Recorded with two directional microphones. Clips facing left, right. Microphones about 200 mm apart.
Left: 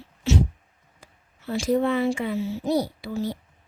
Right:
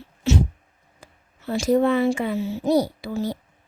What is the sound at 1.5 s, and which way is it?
Speech, 45° right (ahead or behind).